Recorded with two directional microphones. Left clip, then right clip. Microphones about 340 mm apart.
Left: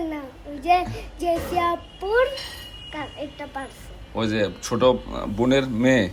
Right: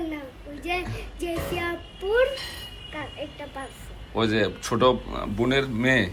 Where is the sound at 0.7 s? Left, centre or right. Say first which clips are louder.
Left 10 dB; centre.